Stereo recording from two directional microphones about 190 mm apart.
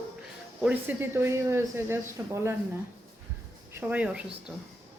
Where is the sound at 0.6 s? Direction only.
10° right (ahead or behind).